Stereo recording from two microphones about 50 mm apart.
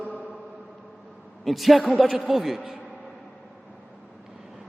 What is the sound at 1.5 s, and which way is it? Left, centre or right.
A man's voice, centre.